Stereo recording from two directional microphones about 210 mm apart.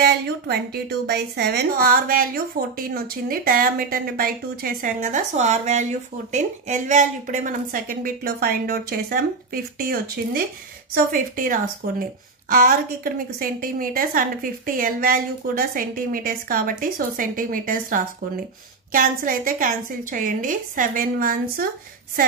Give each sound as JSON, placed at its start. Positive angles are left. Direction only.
{"t": 0.0, "sound": "a woman's voice", "side_deg": -50}